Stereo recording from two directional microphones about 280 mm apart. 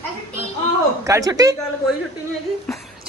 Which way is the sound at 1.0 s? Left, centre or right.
Centre.